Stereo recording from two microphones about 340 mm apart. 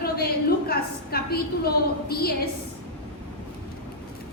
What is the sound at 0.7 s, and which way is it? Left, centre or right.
A woman's voice, left.